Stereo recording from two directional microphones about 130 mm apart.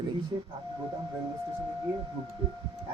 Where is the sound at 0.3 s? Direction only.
30° right (ahead or behind).